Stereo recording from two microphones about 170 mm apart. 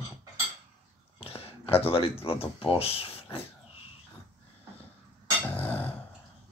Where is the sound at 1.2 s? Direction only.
35° left (ahead or behind).